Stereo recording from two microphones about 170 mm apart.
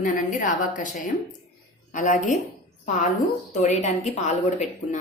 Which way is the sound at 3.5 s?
45° left (ahead or behind).